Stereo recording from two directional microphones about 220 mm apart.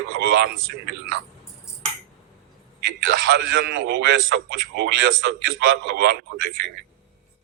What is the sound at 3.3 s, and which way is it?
A man's voice, 45° right (ahead or behind).